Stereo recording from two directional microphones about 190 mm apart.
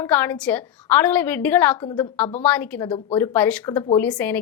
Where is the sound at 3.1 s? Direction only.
10° left (ahead or behind).